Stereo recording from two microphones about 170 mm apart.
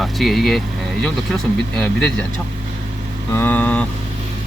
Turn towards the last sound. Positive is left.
turn(degrees=10)  # may be behind; listen again after turning